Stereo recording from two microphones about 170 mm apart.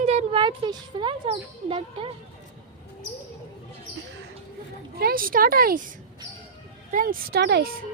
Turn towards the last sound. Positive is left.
turn(degrees=-70)  # may be behind; listen again after turning